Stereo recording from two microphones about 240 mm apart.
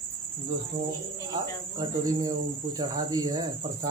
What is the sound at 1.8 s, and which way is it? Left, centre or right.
Speech, centre.